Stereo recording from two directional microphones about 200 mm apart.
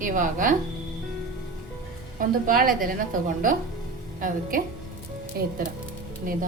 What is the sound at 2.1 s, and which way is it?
A woman's voice, 45° right (ahead or behind).